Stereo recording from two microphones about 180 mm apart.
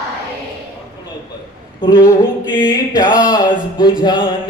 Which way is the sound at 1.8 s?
20° left (ahead or behind).